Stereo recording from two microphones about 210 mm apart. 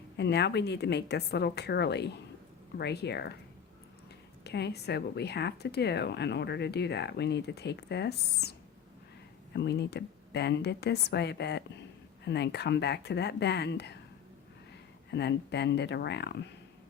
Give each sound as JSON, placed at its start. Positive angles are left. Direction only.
{"t": 0.2, "sound": "speech", "side_deg": 55}
{"t": 4.4, "sound": "speech", "side_deg": 50}
{"t": 15.1, "sound": "speech", "side_deg": 55}